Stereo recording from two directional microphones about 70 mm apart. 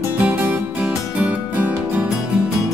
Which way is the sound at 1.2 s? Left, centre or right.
Right.